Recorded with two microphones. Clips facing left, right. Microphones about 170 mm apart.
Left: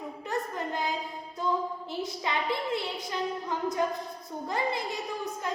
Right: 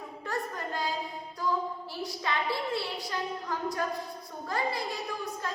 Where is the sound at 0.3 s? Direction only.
20° left (ahead or behind).